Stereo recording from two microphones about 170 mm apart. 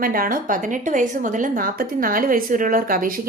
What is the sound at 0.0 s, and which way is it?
A woman's voice, 55° right (ahead or behind).